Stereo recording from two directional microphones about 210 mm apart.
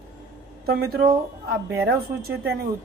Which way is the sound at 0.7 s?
45° right (ahead or behind).